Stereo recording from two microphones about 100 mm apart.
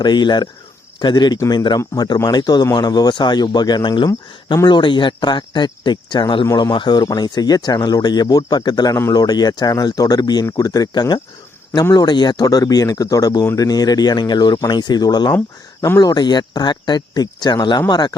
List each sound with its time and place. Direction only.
0.0 s speech: 45° left (ahead or behind)